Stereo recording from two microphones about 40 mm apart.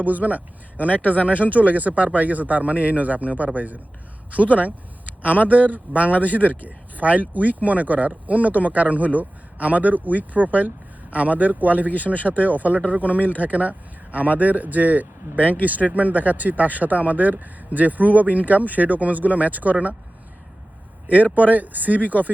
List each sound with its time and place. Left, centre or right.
0.0 s speech: right
0.9 s speech: left
1.3 s speech: right
11.9 s speech: left
12.4 s speech: right
15.4 s speech: left
15.6 s speech: right
21.3 s speech: right